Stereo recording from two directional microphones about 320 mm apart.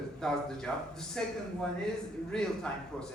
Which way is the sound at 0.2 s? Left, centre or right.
Centre.